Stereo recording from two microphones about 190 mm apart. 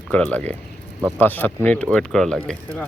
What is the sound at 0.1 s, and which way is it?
Speech, 10° left (ahead or behind).